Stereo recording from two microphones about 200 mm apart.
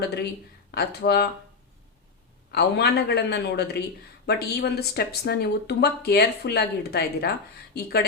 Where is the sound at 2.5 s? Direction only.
55° left (ahead or behind).